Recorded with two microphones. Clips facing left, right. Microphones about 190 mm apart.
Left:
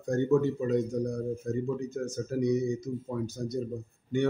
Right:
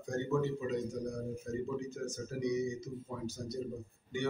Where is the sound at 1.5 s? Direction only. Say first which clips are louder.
Left 3 dB; 50° left (ahead or behind).